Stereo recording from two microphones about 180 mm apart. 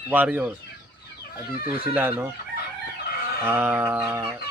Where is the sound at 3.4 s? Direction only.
10° right (ahead or behind).